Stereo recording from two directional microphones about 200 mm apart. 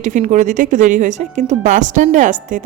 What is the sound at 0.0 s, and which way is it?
Speech, 40° right (ahead or behind).